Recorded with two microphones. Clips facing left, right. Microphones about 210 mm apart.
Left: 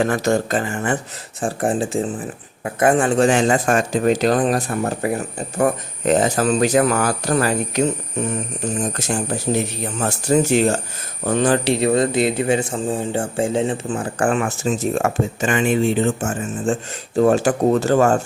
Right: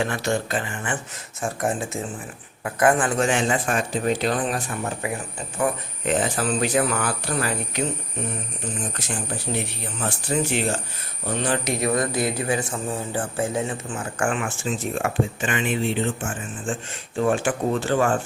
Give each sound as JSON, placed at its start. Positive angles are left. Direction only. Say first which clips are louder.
{"t": 0.0, "sound": "speech", "louder": "left 6 dB", "side_deg": 45}
{"t": 1.4, "sound": "speech", "louder": "left 5 dB", "side_deg": 30}
{"t": 8.6, "sound": "speech", "louder": "left 8 dB", "side_deg": 45}
{"t": 11.6, "sound": "speech", "louder": "left 6 dB", "side_deg": 30}